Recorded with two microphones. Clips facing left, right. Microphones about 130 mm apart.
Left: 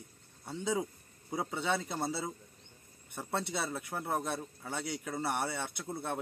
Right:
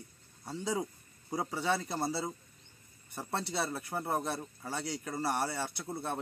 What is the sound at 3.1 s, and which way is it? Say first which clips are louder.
Speech: even; centre (ahead or behind).